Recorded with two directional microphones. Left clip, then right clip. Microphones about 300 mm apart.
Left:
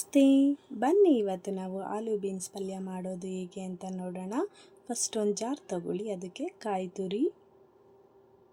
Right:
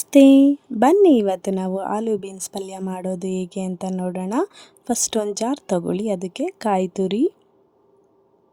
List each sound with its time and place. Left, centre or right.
0.0 s speech: right